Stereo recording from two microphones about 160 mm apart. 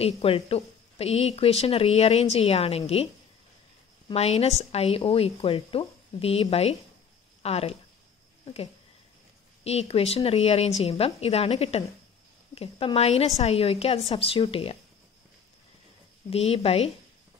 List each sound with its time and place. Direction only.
0.0 s speech: 35° left (ahead or behind)
4.1 s speech: 40° left (ahead or behind)
9.7 s speech: 40° left (ahead or behind)
16.3 s speech: 40° left (ahead or behind)